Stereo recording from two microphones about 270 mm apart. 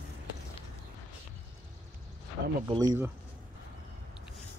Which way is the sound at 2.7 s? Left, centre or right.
Centre.